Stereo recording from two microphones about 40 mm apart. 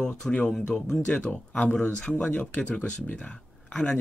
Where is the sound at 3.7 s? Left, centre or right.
Left.